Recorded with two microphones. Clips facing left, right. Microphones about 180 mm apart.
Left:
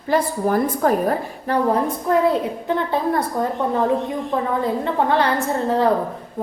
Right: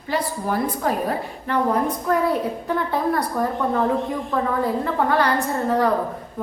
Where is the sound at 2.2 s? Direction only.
20° left (ahead or behind).